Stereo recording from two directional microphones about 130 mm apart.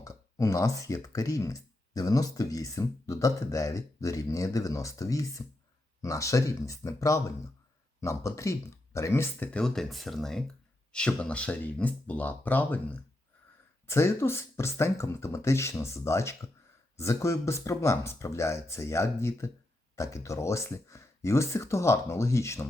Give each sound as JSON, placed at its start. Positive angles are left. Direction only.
{"t": 0.0, "sound": "speech", "side_deg": 25}